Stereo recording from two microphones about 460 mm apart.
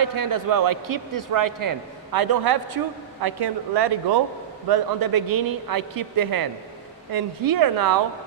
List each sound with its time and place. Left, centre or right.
0.0 s a man's voice: right